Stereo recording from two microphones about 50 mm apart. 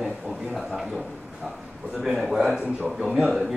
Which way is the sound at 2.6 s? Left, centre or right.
Right.